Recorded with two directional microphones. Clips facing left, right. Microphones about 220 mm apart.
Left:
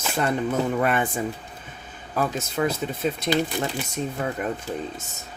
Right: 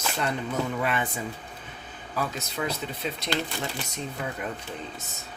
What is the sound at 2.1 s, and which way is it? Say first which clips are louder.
Speech: left 6 dB; 50° left (ahead or behind).